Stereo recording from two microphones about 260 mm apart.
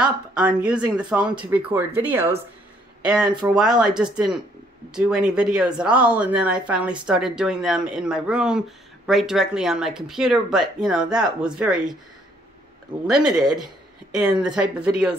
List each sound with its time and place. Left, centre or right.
0.0 s speech: centre
13.0 s speech: centre